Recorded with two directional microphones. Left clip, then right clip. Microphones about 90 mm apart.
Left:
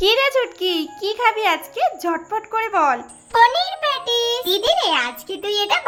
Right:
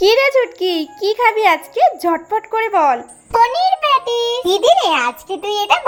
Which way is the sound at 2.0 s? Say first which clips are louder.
Right 5 dB; 40° right (ahead or behind).